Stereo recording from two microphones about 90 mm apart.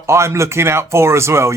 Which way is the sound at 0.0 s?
30° right (ahead or behind).